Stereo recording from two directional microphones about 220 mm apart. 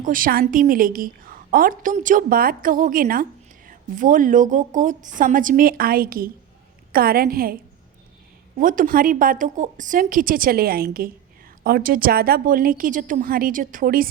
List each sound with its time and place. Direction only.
0.0 s a woman's voice: 40° right (ahead or behind)